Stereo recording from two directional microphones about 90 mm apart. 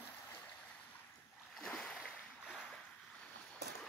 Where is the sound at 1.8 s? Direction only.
5° left (ahead or behind).